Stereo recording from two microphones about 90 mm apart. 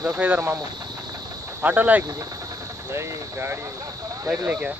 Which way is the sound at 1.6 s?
20° right (ahead or behind).